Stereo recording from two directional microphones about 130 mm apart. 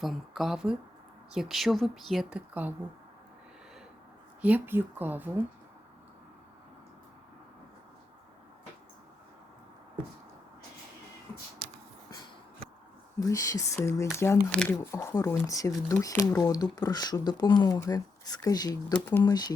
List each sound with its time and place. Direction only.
0.0 s speech: centre (ahead or behind)
2.5 s speech: 15° right (ahead or behind)
4.4 s speech: 10° right (ahead or behind)
13.1 s speech: 25° left (ahead or behind)
14.5 s speech: 10° left (ahead or behind)
14.9 s speech: 25° left (ahead or behind)
18.9 s speech: 15° left (ahead or behind)
19.2 s speech: 30° left (ahead or behind)